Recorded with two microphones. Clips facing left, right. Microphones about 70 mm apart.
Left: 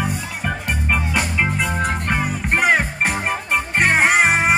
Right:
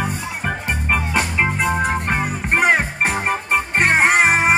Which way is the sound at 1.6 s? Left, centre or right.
Centre.